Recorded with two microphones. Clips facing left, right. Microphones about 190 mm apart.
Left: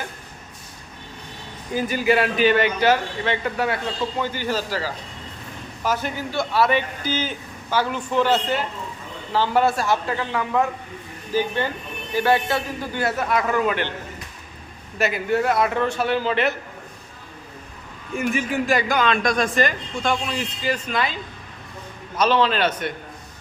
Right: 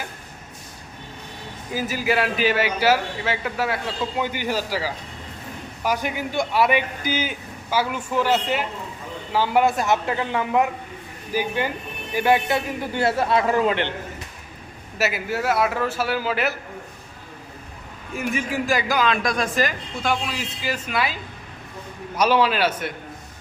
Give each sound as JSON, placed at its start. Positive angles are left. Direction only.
{"t": 1.7, "sound": "a man's voice", "side_deg": -5}
{"t": 4.2, "sound": "a man's voice", "side_deg": -15}
{"t": 14.9, "sound": "a man's voice", "side_deg": -5}
{"t": 18.1, "sound": "a man's voice", "side_deg": 0}